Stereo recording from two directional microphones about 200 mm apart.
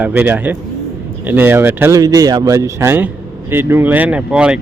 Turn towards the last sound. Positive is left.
turn(degrees=-5)  # may be behind; listen again after turning